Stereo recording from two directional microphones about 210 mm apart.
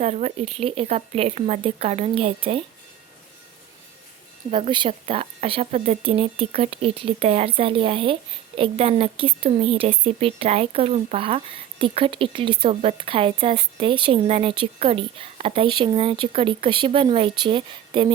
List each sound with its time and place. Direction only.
0.0 s speech: 30° right (ahead or behind)
4.5 s speech: 25° right (ahead or behind)